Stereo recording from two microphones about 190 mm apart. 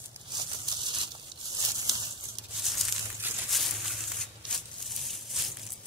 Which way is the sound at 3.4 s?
Centre (ahead or behind).